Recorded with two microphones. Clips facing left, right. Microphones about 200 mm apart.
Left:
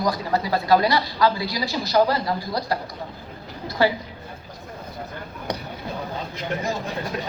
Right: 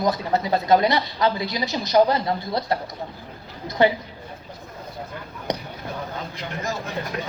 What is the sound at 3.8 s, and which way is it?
Speech, 20° right (ahead or behind).